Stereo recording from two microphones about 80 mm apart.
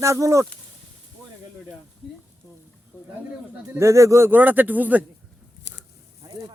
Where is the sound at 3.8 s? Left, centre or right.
Right.